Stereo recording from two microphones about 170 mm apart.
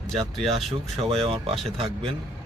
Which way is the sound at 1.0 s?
35° right (ahead or behind).